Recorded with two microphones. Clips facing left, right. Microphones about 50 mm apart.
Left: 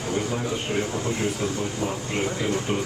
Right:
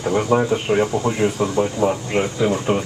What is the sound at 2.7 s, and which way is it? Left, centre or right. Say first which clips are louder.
Speech: right 6 dB; right.